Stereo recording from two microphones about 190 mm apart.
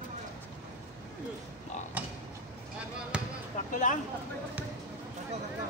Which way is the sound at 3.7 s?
40° left (ahead or behind).